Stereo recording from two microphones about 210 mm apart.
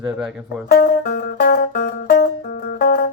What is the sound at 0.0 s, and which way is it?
Speech, centre (ahead or behind).